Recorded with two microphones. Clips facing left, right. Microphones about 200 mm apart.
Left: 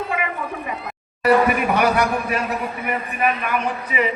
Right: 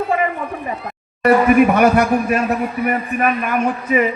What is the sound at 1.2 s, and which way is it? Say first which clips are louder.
Speech: right 5 dB; 50° right (ahead or behind).